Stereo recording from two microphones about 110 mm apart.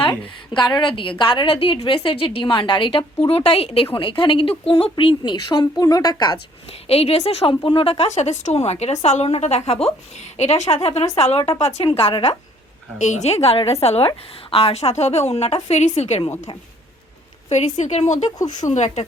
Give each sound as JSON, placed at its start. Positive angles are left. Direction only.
{"t": 0.0, "sound": "speech", "side_deg": 45}
{"t": 3.2, "sound": "a woman's voice", "side_deg": 60}
{"t": 3.9, "sound": "speech", "side_deg": 50}
{"t": 6.8, "sound": "a woman's voice", "side_deg": 65}
{"t": 13.0, "sound": "a woman's voice", "side_deg": 90}
{"t": 17.5, "sound": "a woman's voice", "side_deg": 90}
{"t": 18.3, "sound": "speech", "side_deg": 35}
{"t": 18.7, "sound": "a woman's voice", "side_deg": 90}